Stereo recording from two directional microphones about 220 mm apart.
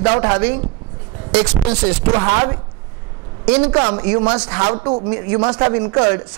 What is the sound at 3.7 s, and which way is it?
A man's voice, 20° right (ahead or behind).